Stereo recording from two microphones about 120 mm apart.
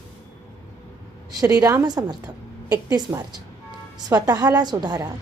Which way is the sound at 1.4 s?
30° right (ahead or behind).